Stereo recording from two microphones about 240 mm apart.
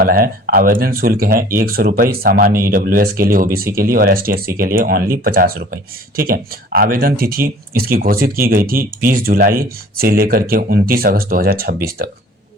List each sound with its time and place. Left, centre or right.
0.0 s speech: right